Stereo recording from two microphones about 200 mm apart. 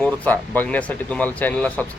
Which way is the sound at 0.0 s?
10° left (ahead or behind).